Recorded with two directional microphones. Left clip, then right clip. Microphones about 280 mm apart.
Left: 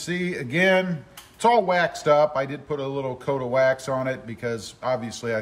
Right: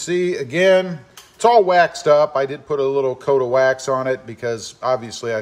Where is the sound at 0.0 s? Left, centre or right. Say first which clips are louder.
Right 8 dB; centre.